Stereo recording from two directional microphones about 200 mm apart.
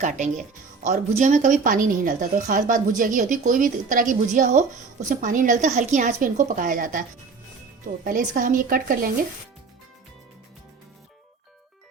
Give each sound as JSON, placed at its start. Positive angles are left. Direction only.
{"t": 0.0, "sound": "a woman's voice", "side_deg": -40}
{"t": 8.0, "sound": "a woman's voice", "side_deg": -40}